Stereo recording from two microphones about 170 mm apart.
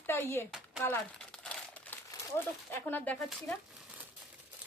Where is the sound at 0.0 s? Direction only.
15° left (ahead or behind).